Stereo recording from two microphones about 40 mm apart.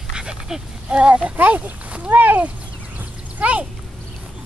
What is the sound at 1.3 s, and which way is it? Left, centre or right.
Speech, right.